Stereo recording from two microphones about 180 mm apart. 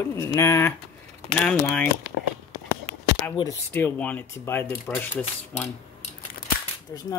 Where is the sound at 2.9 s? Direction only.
35° right (ahead or behind).